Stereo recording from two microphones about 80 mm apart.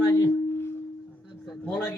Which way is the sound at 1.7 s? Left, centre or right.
Left.